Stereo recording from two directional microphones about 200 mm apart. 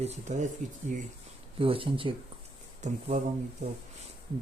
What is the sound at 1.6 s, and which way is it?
Speech, 25° right (ahead or behind).